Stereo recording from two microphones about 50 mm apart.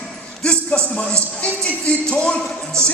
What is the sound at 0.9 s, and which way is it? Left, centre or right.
Speech, left.